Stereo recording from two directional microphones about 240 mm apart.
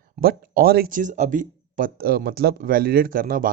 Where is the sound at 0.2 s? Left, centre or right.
Right.